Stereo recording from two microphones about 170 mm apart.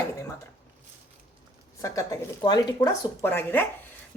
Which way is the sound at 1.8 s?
20° left (ahead or behind).